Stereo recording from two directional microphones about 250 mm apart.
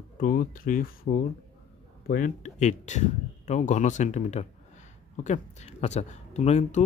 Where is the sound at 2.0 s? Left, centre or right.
Left.